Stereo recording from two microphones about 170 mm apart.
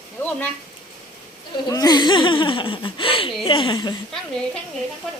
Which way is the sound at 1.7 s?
20° left (ahead or behind).